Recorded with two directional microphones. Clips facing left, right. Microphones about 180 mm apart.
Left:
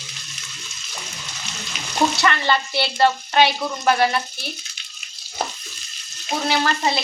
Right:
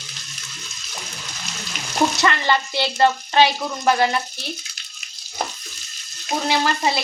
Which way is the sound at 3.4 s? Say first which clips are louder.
Even; 20° right (ahead or behind).